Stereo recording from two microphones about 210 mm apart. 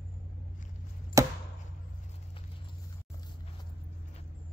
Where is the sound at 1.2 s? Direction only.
15° right (ahead or behind).